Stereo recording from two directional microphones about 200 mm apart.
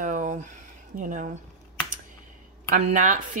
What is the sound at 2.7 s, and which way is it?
Speech, 40° right (ahead or behind).